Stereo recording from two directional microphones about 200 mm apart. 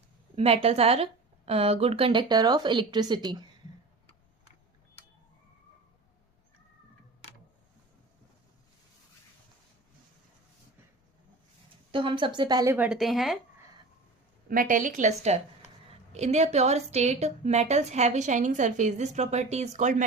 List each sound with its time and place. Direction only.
0.3 s a woman's voice: 30° right (ahead or behind)
11.9 s speech: 25° right (ahead or behind); by 13.4 s centre (ahead or behind)
14.4 s a woman's voice: 45° right (ahead or behind)